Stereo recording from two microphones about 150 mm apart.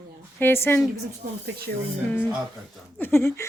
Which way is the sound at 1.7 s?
90° right.